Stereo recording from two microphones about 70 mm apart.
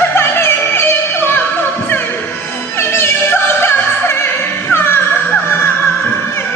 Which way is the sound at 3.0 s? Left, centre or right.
Left.